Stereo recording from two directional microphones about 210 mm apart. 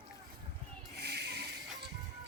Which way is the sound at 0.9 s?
50° right (ahead or behind).